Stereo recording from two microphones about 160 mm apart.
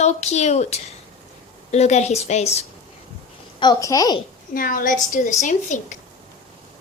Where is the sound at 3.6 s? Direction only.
25° left (ahead or behind).